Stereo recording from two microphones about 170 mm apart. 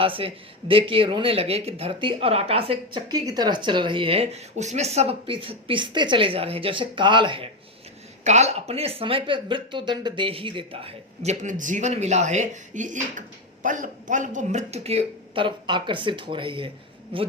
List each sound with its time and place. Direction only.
0.0 s speech: 30° right (ahead or behind)
8.2 s speech: 40° right (ahead or behind)